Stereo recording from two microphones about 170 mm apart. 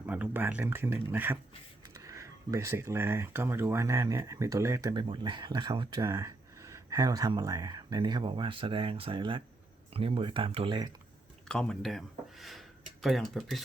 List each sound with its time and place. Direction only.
0.0 s speech: 10° right (ahead or behind); by 10.9 s 25° right (ahead or behind)
11.4 s speech: 5° left (ahead or behind)